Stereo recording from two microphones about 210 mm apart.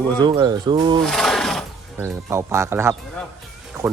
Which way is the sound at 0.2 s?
20° right (ahead or behind).